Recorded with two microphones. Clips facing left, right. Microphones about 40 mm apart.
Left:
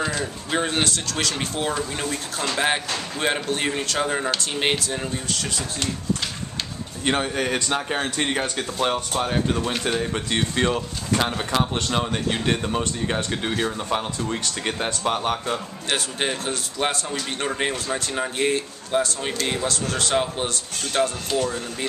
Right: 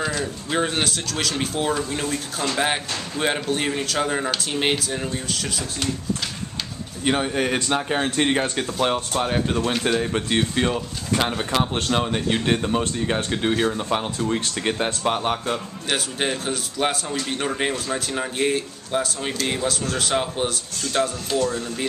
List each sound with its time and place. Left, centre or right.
0.0 s speech: centre
7.1 s speech: centre
21.4 s speech: left